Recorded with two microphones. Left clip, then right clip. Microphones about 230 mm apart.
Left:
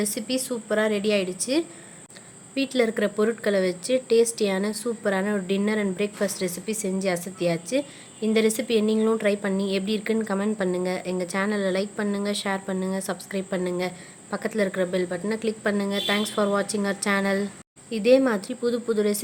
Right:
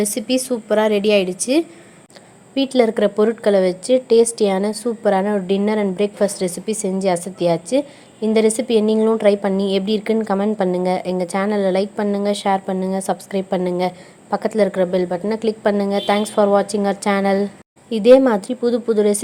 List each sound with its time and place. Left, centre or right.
0.0 s a woman's voice: centre